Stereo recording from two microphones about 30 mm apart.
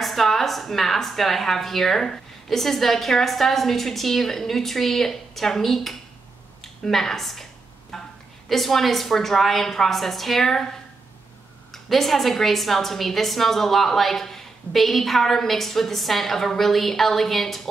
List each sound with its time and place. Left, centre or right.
0.0 s a woman's voice: centre
7.9 s a sound: centre
8.5 s a woman's voice: centre
11.7 s a woman's voice: centre